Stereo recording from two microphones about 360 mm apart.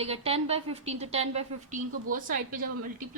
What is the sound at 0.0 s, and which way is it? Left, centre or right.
A woman's voice, centre.